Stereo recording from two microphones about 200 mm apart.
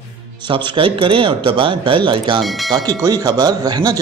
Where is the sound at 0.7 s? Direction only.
25° right (ahead or behind).